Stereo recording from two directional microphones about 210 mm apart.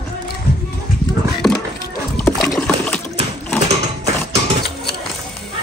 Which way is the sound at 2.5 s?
5° left (ahead or behind).